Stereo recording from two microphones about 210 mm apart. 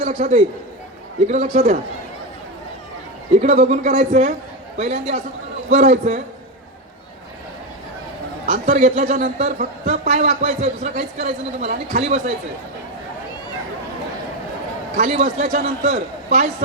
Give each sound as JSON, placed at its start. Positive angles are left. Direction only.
{"t": 0.0, "sound": "a man's voice", "side_deg": -30}
{"t": 1.5, "sound": "a man's voice", "side_deg": -30}
{"t": 3.3, "sound": "a man's voice", "side_deg": -30}
{"t": 8.4, "sound": "a man's voice", "side_deg": -30}
{"t": 14.9, "sound": "a man's voice", "side_deg": -30}